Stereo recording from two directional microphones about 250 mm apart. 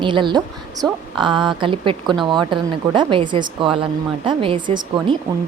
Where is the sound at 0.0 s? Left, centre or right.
Centre.